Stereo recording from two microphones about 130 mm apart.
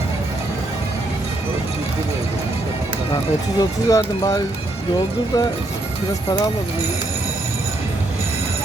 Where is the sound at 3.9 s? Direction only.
25° left (ahead or behind).